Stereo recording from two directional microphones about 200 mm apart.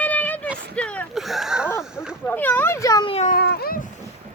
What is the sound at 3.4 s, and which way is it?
Cat, 50° left (ahead or behind).